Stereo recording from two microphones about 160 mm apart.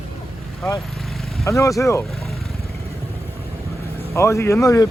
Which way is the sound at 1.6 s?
20° left (ahead or behind).